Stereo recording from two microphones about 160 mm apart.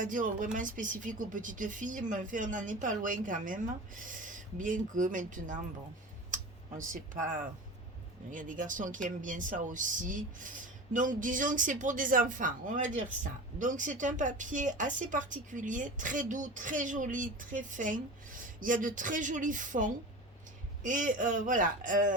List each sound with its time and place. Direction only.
0.0 s speech: 55° right (ahead or behind)